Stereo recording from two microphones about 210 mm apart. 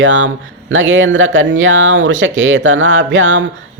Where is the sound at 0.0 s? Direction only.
65° right (ahead or behind).